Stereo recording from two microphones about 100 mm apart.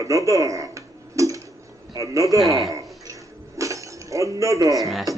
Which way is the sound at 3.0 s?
35° right (ahead or behind).